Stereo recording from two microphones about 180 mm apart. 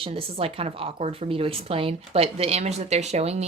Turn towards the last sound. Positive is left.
turn(degrees=-35)  # may be behind; listen again after turning